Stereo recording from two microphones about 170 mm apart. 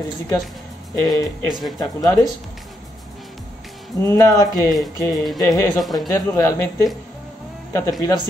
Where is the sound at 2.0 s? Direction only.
20° left (ahead or behind).